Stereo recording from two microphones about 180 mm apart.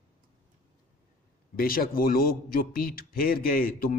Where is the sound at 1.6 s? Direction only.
55° left (ahead or behind).